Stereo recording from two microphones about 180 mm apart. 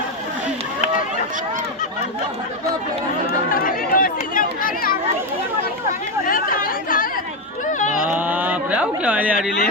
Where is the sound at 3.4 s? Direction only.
50° left (ahead or behind).